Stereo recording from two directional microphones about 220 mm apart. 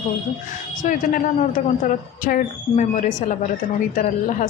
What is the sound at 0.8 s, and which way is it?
A man's voice, 35° left (ahead or behind).